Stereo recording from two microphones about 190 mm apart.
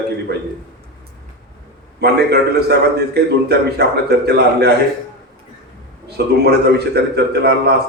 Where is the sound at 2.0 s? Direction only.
60° right (ahead or behind).